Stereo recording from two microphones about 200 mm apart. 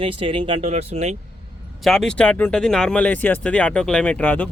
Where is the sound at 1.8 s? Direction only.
Centre (ahead or behind).